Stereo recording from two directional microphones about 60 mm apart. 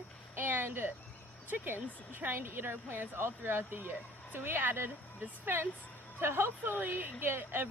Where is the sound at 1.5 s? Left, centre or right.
Right.